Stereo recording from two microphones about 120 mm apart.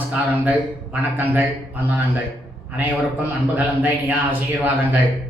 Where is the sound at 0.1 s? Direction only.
15° right (ahead or behind).